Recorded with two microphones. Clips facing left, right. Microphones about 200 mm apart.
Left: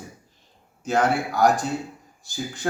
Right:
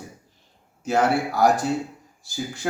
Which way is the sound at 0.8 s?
5° right (ahead or behind).